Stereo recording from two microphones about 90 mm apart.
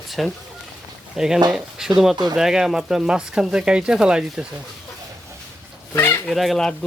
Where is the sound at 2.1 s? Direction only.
50° right (ahead or behind).